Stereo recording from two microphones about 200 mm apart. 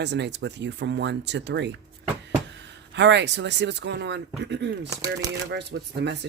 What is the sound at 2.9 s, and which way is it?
Speech, 60° right (ahead or behind).